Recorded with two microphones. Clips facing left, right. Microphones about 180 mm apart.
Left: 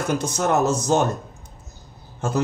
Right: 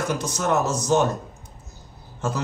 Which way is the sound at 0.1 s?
55° left (ahead or behind).